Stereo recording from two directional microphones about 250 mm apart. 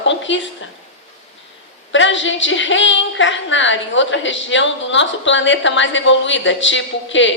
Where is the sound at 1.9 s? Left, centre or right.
Left.